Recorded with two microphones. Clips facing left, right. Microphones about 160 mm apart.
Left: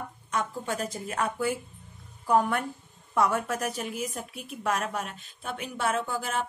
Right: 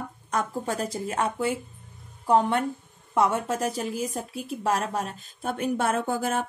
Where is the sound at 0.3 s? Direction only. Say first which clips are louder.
Right 3 dB; 40° right (ahead or behind).